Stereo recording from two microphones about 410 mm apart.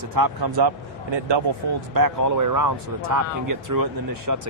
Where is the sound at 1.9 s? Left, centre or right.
Right.